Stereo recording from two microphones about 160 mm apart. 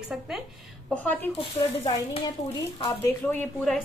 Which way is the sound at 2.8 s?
10° left (ahead or behind).